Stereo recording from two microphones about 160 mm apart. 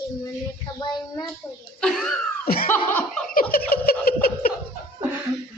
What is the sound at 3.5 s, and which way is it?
Laughter, 70° left (ahead or behind).